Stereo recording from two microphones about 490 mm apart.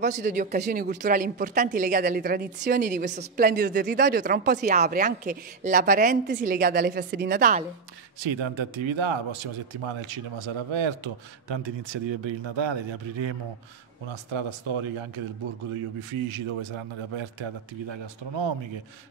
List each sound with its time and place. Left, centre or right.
0.0 s speech: centre
8.2 s a man's voice: right
14.0 s a man's voice: right